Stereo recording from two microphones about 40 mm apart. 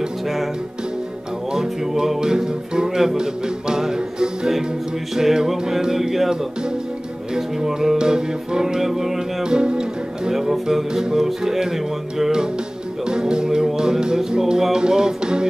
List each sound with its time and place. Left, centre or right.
1.5 s speech: centre
3.2 s music: centre
5.1 s speech: centre
7.3 s speech: centre
9.4 s speech: right
10.3 s speech: centre
13.0 s music: right
13.7 s speech: centre
14.6 s music: centre